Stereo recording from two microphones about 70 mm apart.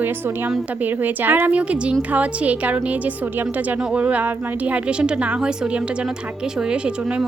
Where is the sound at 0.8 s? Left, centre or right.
Right.